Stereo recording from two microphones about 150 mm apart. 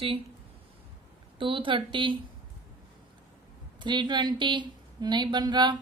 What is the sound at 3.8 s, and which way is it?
A woman's voice, 30° right (ahead or behind).